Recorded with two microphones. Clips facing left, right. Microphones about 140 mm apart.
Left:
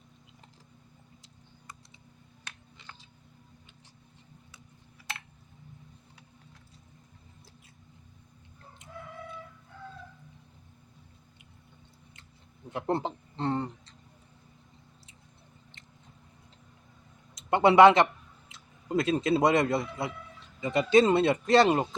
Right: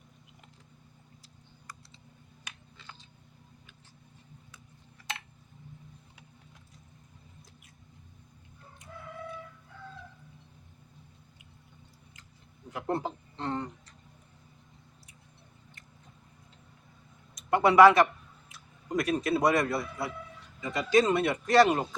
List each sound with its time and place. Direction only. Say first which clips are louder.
12.7 s a sound: left 2 dB; 25° left (ahead or behind)
17.3 s tick-tock: left 1 dB; 25° left (ahead or behind)
20.6 s speech: left 3 dB; 25° left (ahead or behind)